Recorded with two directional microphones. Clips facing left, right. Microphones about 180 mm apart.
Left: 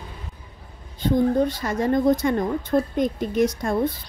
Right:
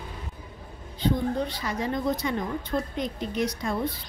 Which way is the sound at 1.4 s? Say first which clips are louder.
Left 7 dB; 45° left (ahead or behind).